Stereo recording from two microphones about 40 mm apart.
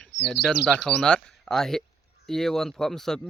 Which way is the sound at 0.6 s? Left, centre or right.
Left.